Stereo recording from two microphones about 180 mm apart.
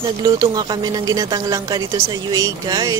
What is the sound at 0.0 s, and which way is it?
Speech, 20° right (ahead or behind).